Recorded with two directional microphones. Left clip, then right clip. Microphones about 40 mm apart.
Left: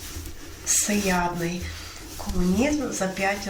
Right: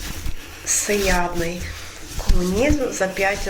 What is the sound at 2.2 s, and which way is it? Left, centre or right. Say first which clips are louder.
Speech: right 5 dB; right.